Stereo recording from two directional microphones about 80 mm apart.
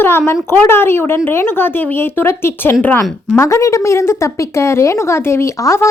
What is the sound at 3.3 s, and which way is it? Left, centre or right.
A woman's voice, left.